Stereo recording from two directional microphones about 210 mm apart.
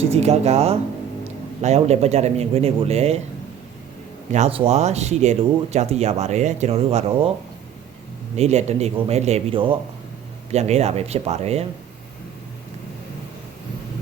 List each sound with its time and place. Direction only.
0.1 s speech: 30° right (ahead or behind)
4.3 s speech: 30° right (ahead or behind)
8.4 s speech: 30° right (ahead or behind)